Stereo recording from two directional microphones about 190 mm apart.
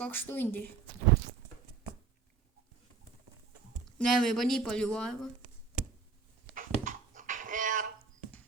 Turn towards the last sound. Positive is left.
turn(degrees=-45)  # may be behind; listen again after turning